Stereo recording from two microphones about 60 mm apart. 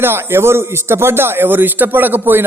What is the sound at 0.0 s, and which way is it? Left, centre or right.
Speech, right.